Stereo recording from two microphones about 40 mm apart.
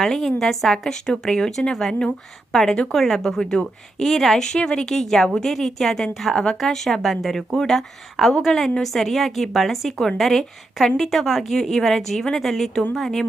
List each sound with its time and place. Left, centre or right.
0.0 s a woman's voice: centre
4.4 s a woman's voice: centre